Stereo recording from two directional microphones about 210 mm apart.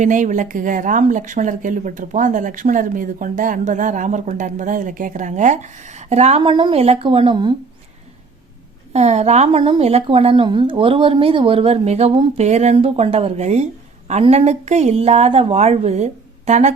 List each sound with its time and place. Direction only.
0.0 s a woman's voice: 35° right (ahead or behind)
8.9 s a woman's voice: 30° right (ahead or behind)